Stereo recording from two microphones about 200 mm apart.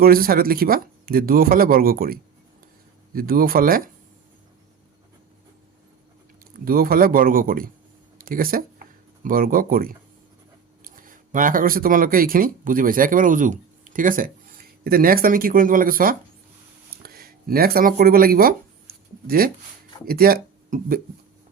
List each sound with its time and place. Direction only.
0.0 s speech: 50° right (ahead or behind)
6.5 s speech: 45° right (ahead or behind)
17.0 s a sound: 50° right (ahead or behind)
20.1 s speech: 50° right (ahead or behind)